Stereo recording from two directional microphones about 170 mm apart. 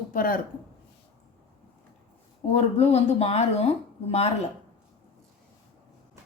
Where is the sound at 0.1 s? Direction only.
55° left (ahead or behind).